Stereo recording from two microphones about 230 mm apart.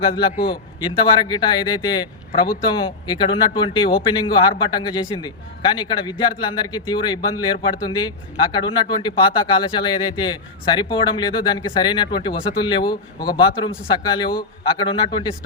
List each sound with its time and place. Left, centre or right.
0.0 s speech: left